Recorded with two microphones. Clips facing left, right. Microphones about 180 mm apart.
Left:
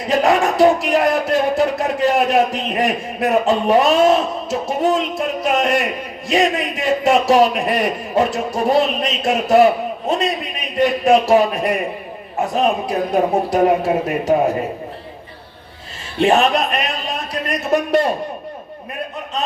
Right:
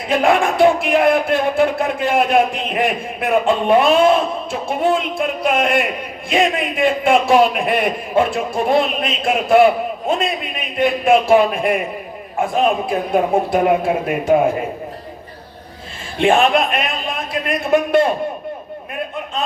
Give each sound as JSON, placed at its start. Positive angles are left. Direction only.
{"t": 0.1, "sound": "speech", "side_deg": 40}
{"t": 16.1, "sound": "speech", "side_deg": 40}